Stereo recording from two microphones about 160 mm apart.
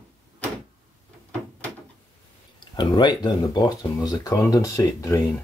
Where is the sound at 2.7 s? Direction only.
25° left (ahead or behind).